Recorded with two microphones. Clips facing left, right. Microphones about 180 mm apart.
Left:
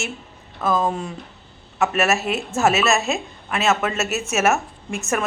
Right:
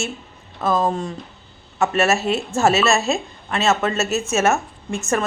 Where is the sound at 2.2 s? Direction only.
35° right (ahead or behind).